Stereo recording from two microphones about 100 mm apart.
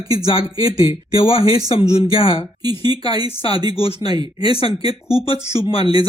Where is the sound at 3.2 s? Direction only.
65° left (ahead or behind).